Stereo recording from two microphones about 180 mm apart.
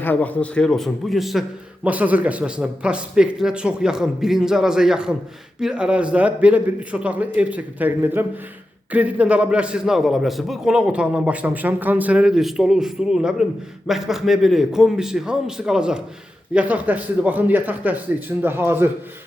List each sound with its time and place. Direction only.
0.0 s a man's voice: 10° left (ahead or behind); by 18.9 s 10° right (ahead or behind)